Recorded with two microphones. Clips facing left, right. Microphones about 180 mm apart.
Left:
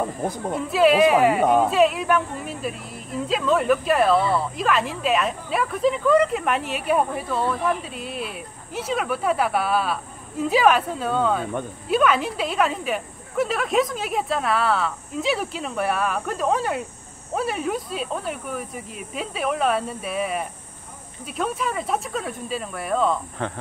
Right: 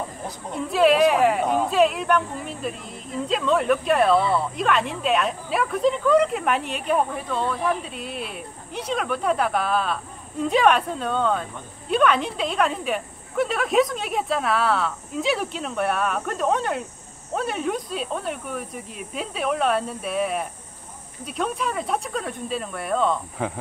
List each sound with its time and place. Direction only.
0.2 s a woman's voice: 50° left (ahead or behind)
0.6 s speech: centre (ahead or behind)
1.4 s a woman's voice: 55° left (ahead or behind)
1.7 s speech: centre (ahead or behind)